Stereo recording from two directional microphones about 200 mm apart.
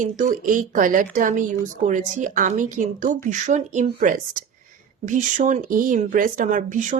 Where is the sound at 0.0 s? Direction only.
40° right (ahead or behind).